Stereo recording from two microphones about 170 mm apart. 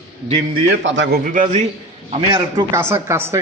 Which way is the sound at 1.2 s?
50° right (ahead or behind).